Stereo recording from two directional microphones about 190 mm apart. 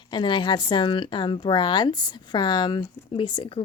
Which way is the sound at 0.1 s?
25° left (ahead or behind).